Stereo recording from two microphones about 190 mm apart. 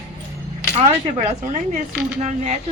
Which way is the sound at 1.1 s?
40° right (ahead or behind).